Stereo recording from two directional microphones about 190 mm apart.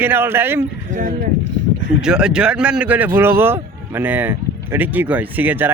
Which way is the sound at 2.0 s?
5° right (ahead or behind).